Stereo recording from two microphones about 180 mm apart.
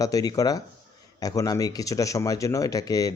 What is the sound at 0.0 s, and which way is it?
A man's voice, 20° left (ahead or behind).